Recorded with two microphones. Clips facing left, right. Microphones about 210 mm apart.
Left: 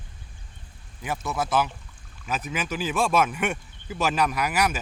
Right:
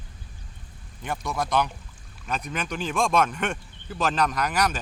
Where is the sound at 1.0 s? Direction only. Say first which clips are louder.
Left 1 dB; 5° left (ahead or behind).